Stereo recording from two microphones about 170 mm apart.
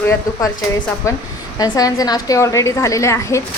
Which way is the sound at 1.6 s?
20° left (ahead or behind).